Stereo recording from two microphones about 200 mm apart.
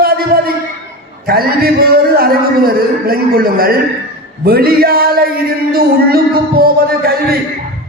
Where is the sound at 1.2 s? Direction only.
50° right (ahead or behind).